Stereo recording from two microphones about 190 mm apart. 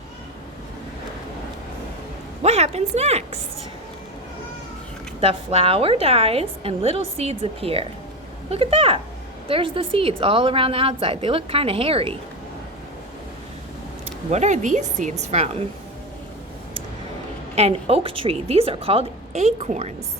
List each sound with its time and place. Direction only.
2.4 s a woman's voice: 35° right (ahead or behind)
5.2 s a woman's voice: 30° right (ahead or behind)
14.3 s a woman's voice: 35° right (ahead or behind)
17.5 s a woman's voice: 30° right (ahead or behind)